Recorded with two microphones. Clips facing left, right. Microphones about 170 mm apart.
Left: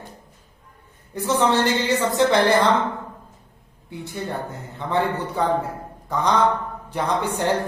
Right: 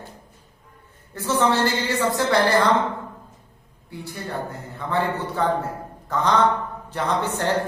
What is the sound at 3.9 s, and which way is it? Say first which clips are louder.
A man's voice: left 2 dB; 20° left (ahead or behind).